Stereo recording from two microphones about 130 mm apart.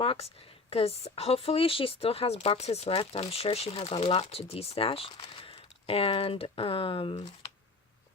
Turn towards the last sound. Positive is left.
turn(degrees=45)  # may be behind; listen again after turning